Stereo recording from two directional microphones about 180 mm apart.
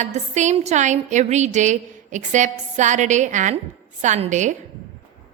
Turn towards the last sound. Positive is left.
turn(degrees=-40)  # may be behind; listen again after turning